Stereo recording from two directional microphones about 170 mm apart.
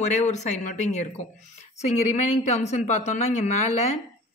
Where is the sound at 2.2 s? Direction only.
40° left (ahead or behind).